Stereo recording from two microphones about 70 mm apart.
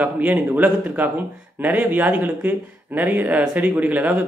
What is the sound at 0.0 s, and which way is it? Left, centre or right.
Speech, right.